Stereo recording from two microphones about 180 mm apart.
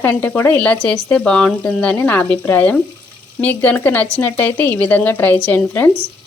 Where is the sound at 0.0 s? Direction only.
10° left (ahead or behind).